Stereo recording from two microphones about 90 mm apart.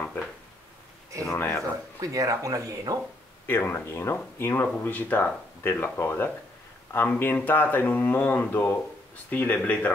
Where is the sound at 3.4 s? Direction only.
25° left (ahead or behind).